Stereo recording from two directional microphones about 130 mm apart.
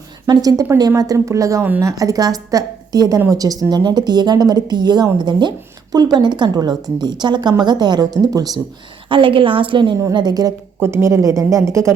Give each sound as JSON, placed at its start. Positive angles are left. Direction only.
{"t": 0.3, "sound": "a woman's voice", "side_deg": -25}
{"t": 9.0, "sound": "a woman's voice", "side_deg": -40}
{"t": 10.8, "sound": "a woman's voice", "side_deg": -20}